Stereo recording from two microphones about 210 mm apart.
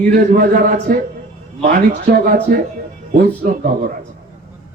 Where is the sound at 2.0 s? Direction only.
40° right (ahead or behind).